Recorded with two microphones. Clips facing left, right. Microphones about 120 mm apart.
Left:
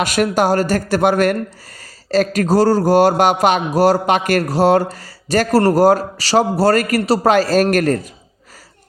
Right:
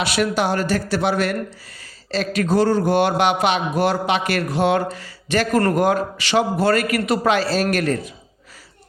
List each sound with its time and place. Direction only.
0.0 s speech: 45° left (ahead or behind)